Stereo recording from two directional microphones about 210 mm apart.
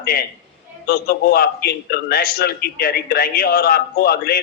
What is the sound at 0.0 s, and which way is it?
A man's voice, 45° left (ahead or behind).